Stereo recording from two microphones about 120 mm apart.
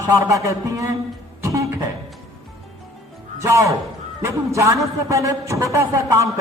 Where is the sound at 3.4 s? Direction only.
25° right (ahead or behind).